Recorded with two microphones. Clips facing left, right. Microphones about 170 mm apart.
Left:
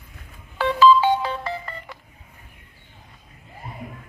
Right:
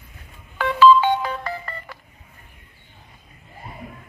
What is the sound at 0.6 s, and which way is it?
Ringtone, 30° left (ahead or behind).